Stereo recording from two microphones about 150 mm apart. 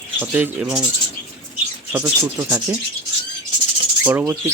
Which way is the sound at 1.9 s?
20° right (ahead or behind).